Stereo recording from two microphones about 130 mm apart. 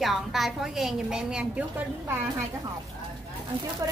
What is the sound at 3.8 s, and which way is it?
Speech, 25° right (ahead or behind).